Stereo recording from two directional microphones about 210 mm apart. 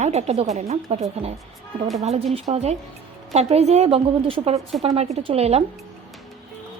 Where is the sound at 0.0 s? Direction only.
30° right (ahead or behind).